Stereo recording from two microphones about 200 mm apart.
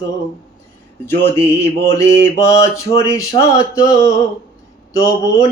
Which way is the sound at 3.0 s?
15° left (ahead or behind).